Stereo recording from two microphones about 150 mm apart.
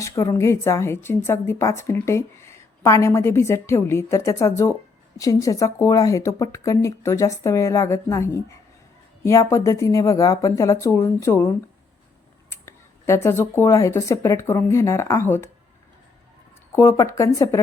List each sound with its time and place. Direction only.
0.0 s a woman's voice: 20° left (ahead or behind)
16.7 s a woman's voice: 20° left (ahead or behind)